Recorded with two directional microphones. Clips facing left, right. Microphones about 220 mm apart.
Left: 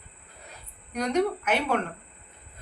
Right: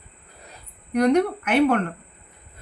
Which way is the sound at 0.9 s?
55° right (ahead or behind).